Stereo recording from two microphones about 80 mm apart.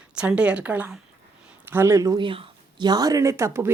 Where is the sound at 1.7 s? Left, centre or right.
Right.